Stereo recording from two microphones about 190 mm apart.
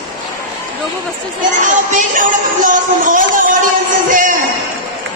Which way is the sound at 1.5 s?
40° right (ahead or behind).